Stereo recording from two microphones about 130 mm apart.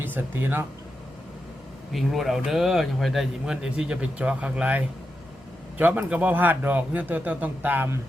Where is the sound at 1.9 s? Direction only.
Centre (ahead or behind).